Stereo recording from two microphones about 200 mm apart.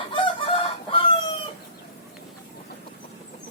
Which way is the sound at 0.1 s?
25° left (ahead or behind).